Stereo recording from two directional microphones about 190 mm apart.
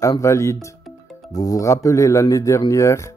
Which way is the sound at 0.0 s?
15° left (ahead or behind).